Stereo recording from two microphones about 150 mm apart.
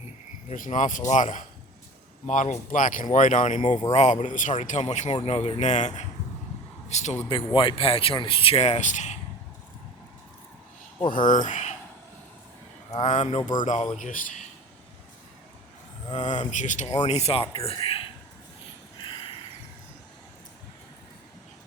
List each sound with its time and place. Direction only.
0.4 s speech: 55° left (ahead or behind)
3.6 s speech: 30° left (ahead or behind)
3.9 s speech: 55° left (ahead or behind)
7.5 s speech: 35° left (ahead or behind); by 9.1 s 55° left (ahead or behind)
11.3 s speech: 55° left (ahead or behind)
13.1 s speech: 45° left (ahead or behind)
16.1 s speech: 50° left (ahead or behind)
19.0 s a sound: 35° left (ahead or behind)